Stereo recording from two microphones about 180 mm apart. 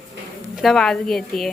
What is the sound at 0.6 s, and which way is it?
Speech, 5° left (ahead or behind).